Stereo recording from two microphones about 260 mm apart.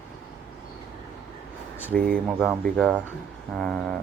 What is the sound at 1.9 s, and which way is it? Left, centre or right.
Speech, right.